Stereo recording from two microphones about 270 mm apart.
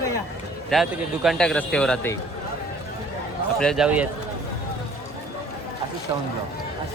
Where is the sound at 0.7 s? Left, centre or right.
Centre.